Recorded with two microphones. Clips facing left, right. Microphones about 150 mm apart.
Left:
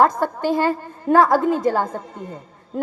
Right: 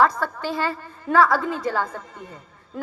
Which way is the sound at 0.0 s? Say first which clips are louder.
Left 3 dB; 50° left (ahead or behind).